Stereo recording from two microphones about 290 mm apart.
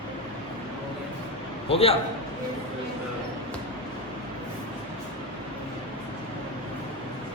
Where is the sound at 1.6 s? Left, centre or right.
Centre.